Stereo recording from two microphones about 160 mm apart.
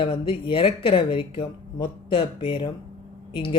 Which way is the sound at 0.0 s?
30° left (ahead or behind).